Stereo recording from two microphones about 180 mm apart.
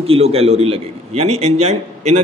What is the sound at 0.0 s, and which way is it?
A man's voice, 35° right (ahead or behind).